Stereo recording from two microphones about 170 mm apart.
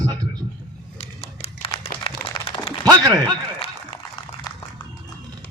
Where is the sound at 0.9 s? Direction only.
35° left (ahead or behind).